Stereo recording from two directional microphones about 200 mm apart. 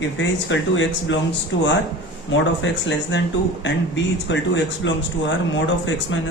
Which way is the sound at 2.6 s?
65° left (ahead or behind).